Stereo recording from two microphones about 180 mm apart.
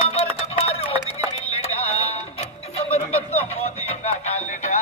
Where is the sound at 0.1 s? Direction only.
35° left (ahead or behind).